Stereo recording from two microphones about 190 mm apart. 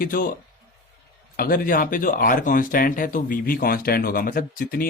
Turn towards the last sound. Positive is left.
turn(degrees=50)  # may be behind; listen again after turning